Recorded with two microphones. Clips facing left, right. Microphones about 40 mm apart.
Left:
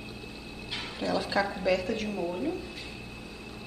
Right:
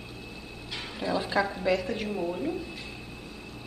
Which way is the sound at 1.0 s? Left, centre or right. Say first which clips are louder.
Right 1 dB; centre.